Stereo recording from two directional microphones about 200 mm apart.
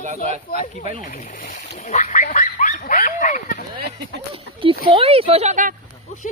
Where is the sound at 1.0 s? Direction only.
40° left (ahead or behind).